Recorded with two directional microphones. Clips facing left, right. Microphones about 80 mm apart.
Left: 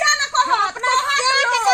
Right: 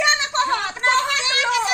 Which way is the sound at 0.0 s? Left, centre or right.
Left.